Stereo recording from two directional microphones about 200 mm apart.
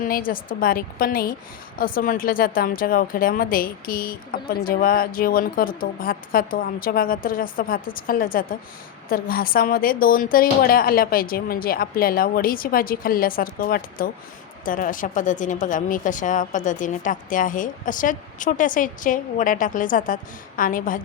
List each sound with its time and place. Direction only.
0.0 s a woman's voice: 45° left (ahead or behind)